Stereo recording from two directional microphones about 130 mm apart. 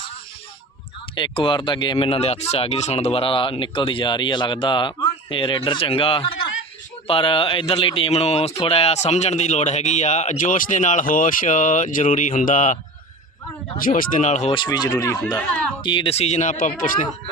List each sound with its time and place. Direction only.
1.1 s speech: 40° left (ahead or behind); by 14.5 s 65° left (ahead or behind)
14.5 s speech: 35° left (ahead or behind)
15.4 s speech: 10° left (ahead or behind)
15.8 s speech: 40° left (ahead or behind); by 17.1 s 85° left